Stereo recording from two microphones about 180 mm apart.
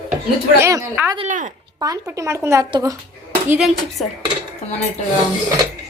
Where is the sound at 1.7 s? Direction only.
20° right (ahead or behind).